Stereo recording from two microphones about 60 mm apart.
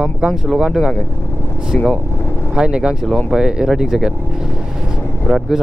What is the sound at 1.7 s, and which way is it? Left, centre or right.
Speech, centre.